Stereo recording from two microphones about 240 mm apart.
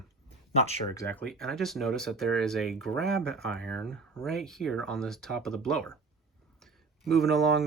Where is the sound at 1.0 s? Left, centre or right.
Centre.